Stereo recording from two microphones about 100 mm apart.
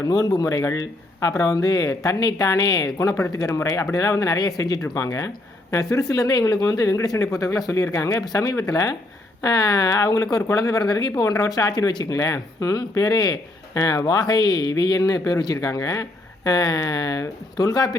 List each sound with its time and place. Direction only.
0.0 s speech: 35° left (ahead or behind)
8.4 s speech: 25° left (ahead or behind)
8.7 s speech: 40° left (ahead or behind)